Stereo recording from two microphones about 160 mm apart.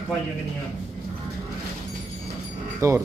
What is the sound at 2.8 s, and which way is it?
Speech, 20° right (ahead or behind).